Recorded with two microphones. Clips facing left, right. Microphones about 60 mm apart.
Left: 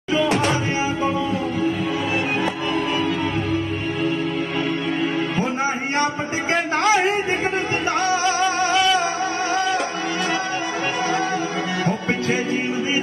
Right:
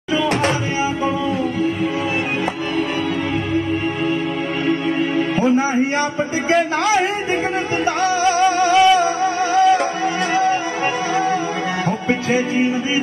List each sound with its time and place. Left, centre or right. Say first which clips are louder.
6.5 s speech: right 2 dB; left
8.2 s music: right 4 dB; right